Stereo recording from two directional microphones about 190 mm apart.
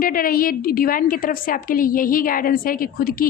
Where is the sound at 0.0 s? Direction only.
50° left (ahead or behind).